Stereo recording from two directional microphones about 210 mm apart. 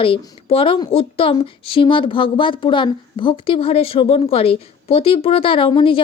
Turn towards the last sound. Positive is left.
turn(degrees=25)  # may be behind; listen again after turning